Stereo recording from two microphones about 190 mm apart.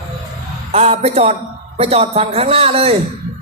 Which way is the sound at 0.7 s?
35° right (ahead or behind).